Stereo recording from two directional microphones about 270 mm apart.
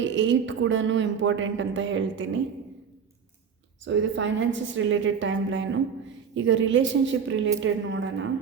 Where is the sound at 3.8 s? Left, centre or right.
Right.